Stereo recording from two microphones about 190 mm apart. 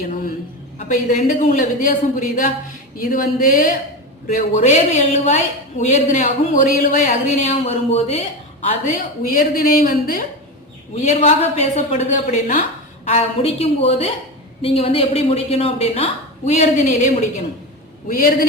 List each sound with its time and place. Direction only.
0.1 s a sound: 45° left (ahead or behind)
0.8 s a woman's voice: 40° left (ahead or behind)
9.3 s a woman's voice: 50° left (ahead or behind)
10.9 s a woman's voice: 35° left (ahead or behind)